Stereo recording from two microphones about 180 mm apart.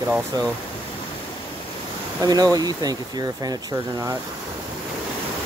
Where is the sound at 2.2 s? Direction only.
20° right (ahead or behind).